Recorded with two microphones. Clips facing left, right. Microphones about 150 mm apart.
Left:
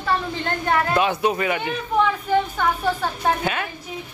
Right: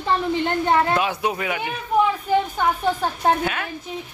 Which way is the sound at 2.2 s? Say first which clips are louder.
Even; 15° right (ahead or behind).